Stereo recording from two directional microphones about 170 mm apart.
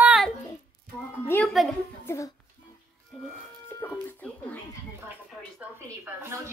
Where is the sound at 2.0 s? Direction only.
15° left (ahead or behind).